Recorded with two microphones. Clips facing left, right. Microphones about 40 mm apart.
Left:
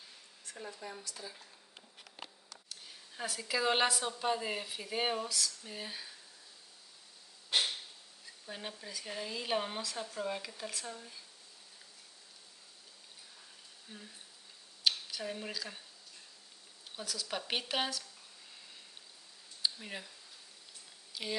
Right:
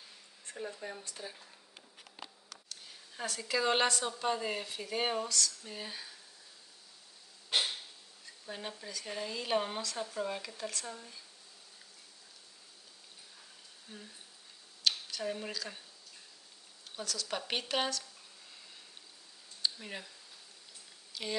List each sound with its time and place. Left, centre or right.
0.6 s speech: centre
1.0 s speech: right
2.7 s speech: centre
8.5 s speech: centre
13.9 s speech: centre
16.9 s speech: centre
19.6 s a sound: centre
21.1 s a sound: centre